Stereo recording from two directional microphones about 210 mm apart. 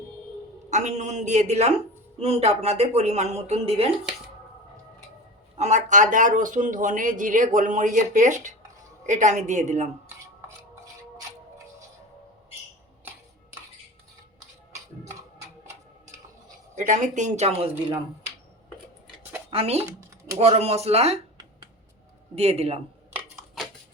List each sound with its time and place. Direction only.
0.7 s speech: 35° right (ahead or behind)
5.5 s speech: 35° right (ahead or behind)
16.7 s speech: 35° right (ahead or behind)
19.5 s speech: 30° right (ahead or behind)
22.4 s speech: 30° right (ahead or behind)